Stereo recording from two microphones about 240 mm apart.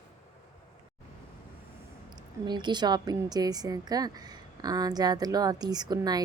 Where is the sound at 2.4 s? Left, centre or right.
Centre.